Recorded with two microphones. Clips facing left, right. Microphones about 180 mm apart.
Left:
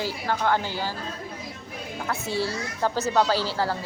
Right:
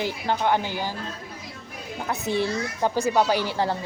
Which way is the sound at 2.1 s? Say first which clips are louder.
Right 3 dB; 20° right (ahead or behind).